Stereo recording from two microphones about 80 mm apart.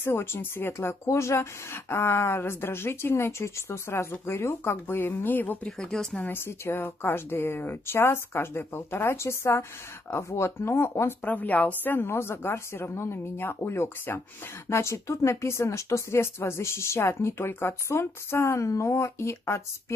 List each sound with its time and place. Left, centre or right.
0.0 s speech: left
5.7 s speech: centre
6.2 s speech: left
11.2 s speech: centre; by 19.6 s left